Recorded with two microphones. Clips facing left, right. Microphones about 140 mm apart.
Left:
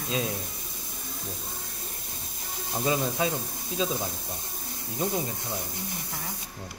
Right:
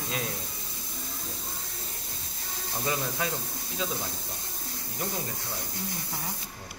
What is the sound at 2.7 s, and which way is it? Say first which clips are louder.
Speech: left 5 dB; 20° left (ahead or behind).